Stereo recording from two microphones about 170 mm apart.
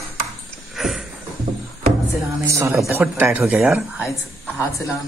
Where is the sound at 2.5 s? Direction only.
15° right (ahead or behind).